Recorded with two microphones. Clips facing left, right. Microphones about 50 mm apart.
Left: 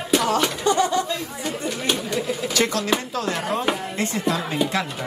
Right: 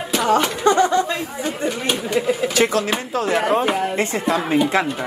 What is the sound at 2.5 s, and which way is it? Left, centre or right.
Speech, centre.